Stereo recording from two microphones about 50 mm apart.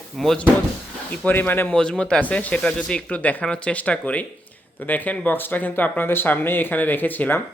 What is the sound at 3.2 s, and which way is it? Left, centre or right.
Speech, left.